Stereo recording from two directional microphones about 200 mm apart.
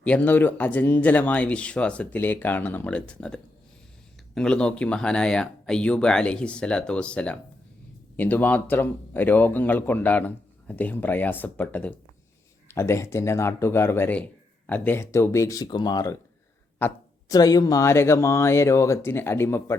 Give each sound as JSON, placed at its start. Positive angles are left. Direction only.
{"t": 0.0, "sound": "speech", "side_deg": 5}